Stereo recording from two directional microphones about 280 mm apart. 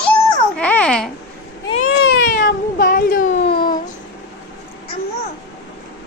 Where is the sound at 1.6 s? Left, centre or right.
Left.